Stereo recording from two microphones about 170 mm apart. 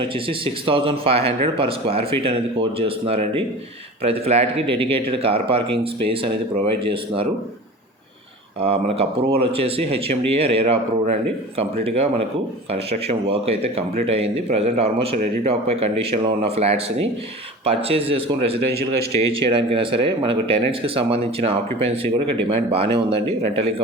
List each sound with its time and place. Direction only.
0.0 s speech: 30° right (ahead or behind)
8.6 s speech: 35° right (ahead or behind)